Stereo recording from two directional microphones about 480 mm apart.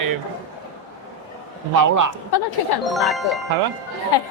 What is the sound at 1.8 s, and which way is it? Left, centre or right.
Speech, right.